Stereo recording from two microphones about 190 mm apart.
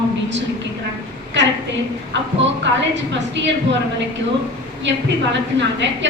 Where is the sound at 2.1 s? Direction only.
70° right (ahead or behind).